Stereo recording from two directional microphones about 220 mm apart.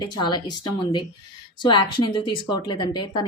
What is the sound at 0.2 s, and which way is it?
Speech, 20° left (ahead or behind).